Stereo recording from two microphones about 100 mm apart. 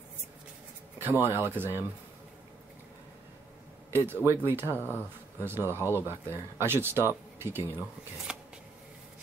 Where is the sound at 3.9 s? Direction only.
25° right (ahead or behind).